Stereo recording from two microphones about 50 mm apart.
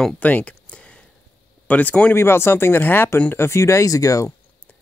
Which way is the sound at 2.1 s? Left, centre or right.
Left.